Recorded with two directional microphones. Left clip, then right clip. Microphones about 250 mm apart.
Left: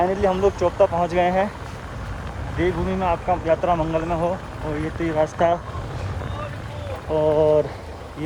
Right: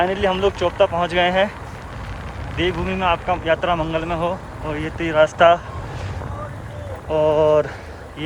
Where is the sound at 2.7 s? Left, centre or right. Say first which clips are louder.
Right 3 dB; centre.